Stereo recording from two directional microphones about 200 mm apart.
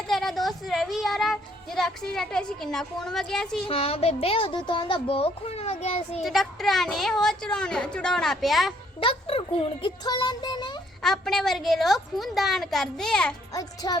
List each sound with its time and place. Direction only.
0.1 s speech: centre (ahead or behind)
3.7 s speech: 30° left (ahead or behind)
6.2 s a woman's voice: centre (ahead or behind)
9.0 s speech: 30° left (ahead or behind)
11.0 s a woman's voice: centre (ahead or behind)
13.5 s speech: 20° left (ahead or behind)